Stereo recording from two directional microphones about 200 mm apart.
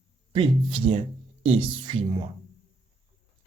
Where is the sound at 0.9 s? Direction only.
35° right (ahead or behind).